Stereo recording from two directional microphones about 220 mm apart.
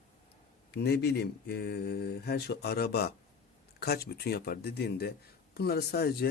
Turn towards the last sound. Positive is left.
turn(degrees=45)  # may be behind; listen again after turning